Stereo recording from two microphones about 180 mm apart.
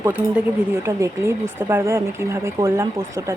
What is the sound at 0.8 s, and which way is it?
Speech, 15° right (ahead or behind).